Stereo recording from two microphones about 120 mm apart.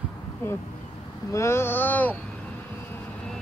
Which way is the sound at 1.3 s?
25° left (ahead or behind).